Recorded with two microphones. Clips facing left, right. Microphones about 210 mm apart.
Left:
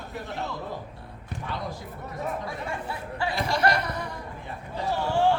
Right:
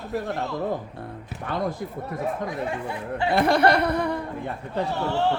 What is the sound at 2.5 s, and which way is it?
Speech, 20° right (ahead or behind).